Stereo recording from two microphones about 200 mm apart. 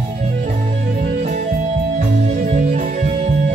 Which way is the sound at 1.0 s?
35° right (ahead or behind).